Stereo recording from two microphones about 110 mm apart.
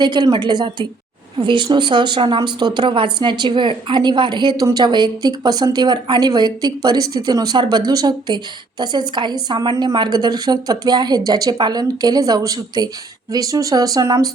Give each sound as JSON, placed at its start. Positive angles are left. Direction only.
{"t": 0.0, "sound": "a woman's voice", "side_deg": -40}